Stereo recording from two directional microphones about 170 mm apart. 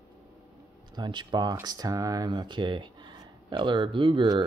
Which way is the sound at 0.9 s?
25° right (ahead or behind).